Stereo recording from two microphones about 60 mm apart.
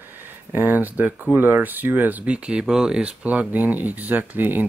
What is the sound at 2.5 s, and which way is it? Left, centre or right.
Speech, centre.